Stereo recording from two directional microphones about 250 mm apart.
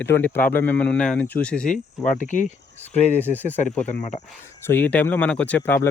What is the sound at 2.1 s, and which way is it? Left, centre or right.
Speech, left.